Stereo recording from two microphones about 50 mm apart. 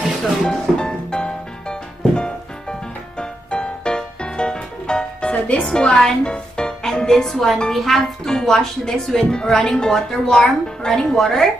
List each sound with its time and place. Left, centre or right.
0.4 s music: centre
7.7 s a woman's voice: centre